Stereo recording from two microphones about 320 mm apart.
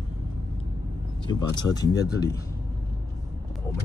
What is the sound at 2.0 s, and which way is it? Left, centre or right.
Speech, left.